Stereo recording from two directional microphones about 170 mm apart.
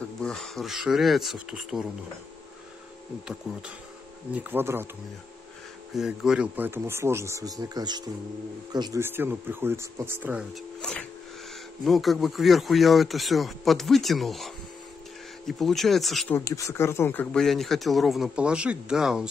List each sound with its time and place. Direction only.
0.2 s speech: centre (ahead or behind)
4.3 s speech: 10° right (ahead or behind)
5.9 s speech: 5° right (ahead or behind); by 9.0 s 25° right (ahead or behind)
9.0 s speech: 10° right (ahead or behind)
10.5 s speech: 5° left (ahead or behind)
16.3 s speech: 20° left (ahead or behind); by 19.2 s 5° right (ahead or behind)